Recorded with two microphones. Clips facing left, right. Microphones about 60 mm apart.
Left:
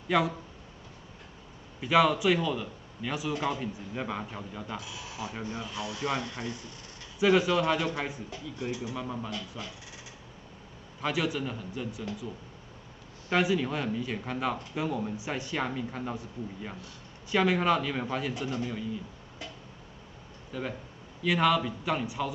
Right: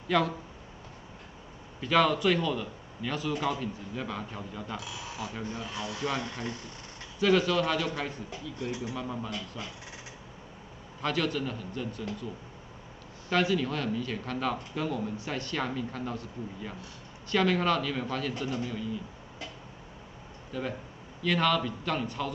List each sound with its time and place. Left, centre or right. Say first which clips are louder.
0.1 s a man's voice: even; centre
1.8 s a man's voice: left 1 dB; centre
4.4 s a man's voice: even; centre
8.9 s speech: even; centre
11.0 s a man's voice: even; centre
13.3 s a man's voice: even; centre
20.5 s a man's voice: right 1 dB; centre